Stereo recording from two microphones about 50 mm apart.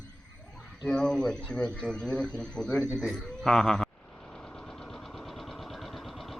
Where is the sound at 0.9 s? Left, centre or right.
Centre.